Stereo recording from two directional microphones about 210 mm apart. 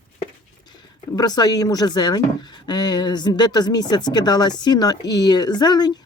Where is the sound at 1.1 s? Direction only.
20° left (ahead or behind).